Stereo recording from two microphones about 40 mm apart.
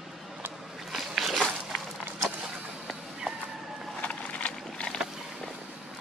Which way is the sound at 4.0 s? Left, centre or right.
Left.